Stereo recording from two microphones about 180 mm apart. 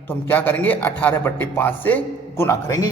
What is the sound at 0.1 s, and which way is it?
A man's voice, 10° left (ahead or behind).